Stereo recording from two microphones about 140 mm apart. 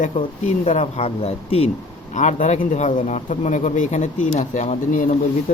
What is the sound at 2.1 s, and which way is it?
A man's voice, 60° left (ahead or behind).